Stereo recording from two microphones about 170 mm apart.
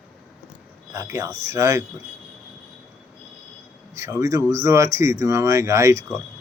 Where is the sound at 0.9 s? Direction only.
15° right (ahead or behind).